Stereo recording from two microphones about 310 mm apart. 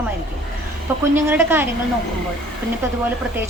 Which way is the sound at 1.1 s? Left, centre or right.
Centre.